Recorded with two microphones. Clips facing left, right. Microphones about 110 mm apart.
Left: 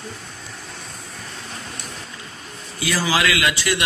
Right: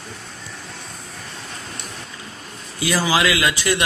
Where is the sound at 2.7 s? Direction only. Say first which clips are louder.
Right 2 dB; 25° right (ahead or behind).